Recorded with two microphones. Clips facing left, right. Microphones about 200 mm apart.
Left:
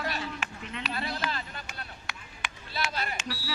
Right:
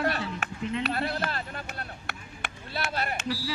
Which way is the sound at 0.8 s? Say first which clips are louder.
Even; 55° right (ahead or behind).